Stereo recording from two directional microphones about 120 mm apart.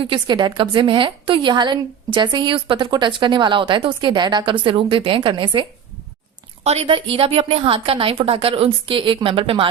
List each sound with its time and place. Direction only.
0.0 s a woman's voice: 40° right (ahead or behind)
6.7 s a woman's voice: 55° right (ahead or behind)